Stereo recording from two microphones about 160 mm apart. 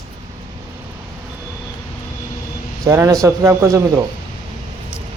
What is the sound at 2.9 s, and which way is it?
Speech, 20° right (ahead or behind).